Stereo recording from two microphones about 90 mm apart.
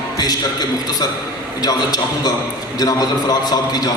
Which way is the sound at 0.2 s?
50° left (ahead or behind).